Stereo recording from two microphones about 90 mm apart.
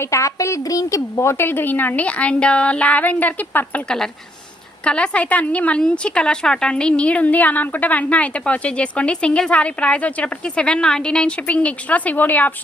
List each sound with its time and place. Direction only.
0.0 s a woman's voice: 35° left (ahead or behind)
3.8 s a woman's voice: 5° left (ahead or behind)